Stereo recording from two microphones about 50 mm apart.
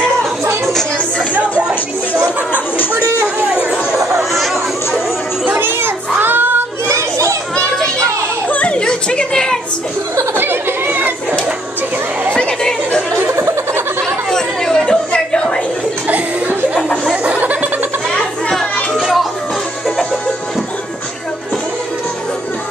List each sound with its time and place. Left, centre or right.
1.6 s music: centre
4.2 s chatter: centre
5.6 s child singing: right
6.9 s children playing: right
8.5 s children playing: left
10.3 s a sound: right
12.4 s a sound: centre
13.3 s chuckle: right
14.0 s chatter: centre
17.2 s chuckle: right
18.9 s music: centre